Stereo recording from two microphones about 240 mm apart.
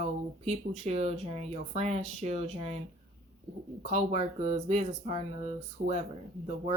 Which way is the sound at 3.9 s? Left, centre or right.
Right.